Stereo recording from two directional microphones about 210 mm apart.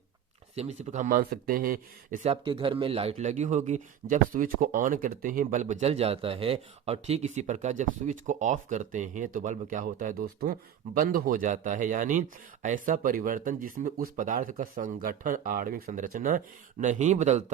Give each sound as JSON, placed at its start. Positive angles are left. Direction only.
{"t": 0.5, "sound": "speech", "side_deg": -30}